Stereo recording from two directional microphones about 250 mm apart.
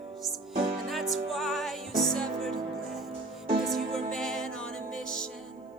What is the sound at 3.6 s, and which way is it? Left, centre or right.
Music, centre.